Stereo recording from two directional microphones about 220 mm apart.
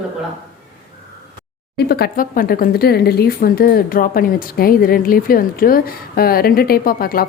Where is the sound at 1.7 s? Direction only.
45° left (ahead or behind).